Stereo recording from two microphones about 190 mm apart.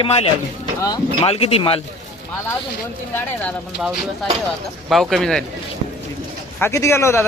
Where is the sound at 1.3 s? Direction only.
30° left (ahead or behind).